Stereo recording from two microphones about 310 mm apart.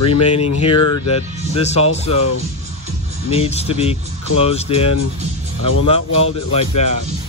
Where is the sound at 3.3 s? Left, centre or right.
Centre.